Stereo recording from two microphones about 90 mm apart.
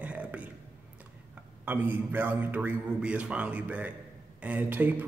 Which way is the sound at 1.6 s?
20° right (ahead or behind).